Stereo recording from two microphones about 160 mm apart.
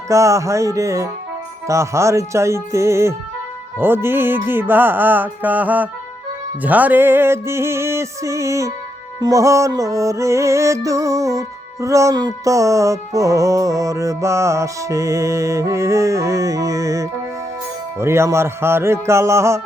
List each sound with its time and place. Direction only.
0.1 s music: 20° right (ahead or behind)